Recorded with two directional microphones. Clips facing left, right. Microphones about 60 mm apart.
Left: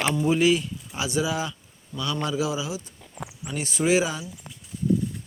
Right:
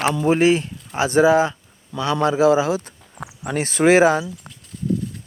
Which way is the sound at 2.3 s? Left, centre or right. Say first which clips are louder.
Right 14 dB; right.